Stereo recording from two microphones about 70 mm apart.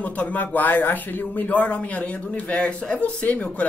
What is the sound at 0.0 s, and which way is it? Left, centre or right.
Speech, left.